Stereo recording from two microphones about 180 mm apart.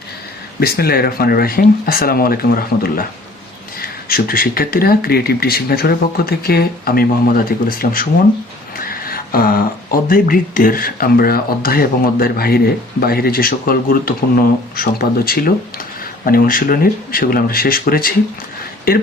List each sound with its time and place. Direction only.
0.6 s speech: 60° left (ahead or behind)